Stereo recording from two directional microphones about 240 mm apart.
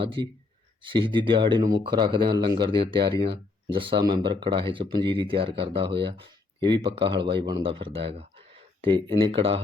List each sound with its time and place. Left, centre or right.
0.2 s speech: centre